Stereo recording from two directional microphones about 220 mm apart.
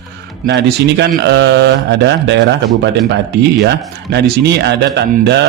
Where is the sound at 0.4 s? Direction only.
50° right (ahead or behind).